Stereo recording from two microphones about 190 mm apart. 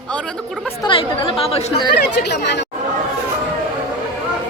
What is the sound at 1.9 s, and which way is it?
Speech, 60° left (ahead or behind).